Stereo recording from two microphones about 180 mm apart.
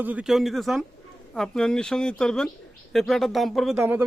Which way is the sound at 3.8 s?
10° right (ahead or behind).